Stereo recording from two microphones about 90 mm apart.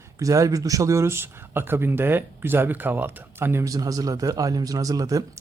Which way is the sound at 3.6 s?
40° right (ahead or behind).